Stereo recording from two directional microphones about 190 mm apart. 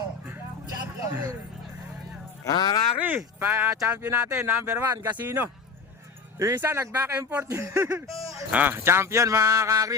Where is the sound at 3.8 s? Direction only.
5° right (ahead or behind).